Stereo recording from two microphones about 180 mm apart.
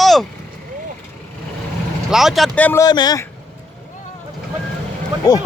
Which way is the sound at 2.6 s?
10° left (ahead or behind).